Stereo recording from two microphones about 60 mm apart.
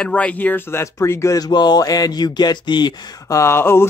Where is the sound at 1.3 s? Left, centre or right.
Left.